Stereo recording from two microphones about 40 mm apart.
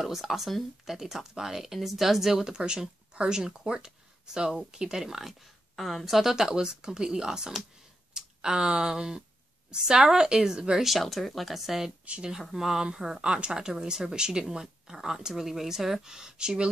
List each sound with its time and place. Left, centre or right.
0.0 s speech: centre
5.0 s speech: centre
10.8 s speech: centre; by 16.7 s right